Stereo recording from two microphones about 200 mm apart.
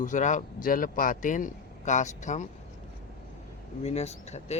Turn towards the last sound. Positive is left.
turn(degrees=35)  # may be behind; listen again after turning